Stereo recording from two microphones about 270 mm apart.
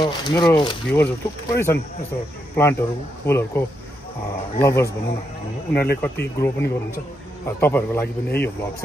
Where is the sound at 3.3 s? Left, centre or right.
Centre.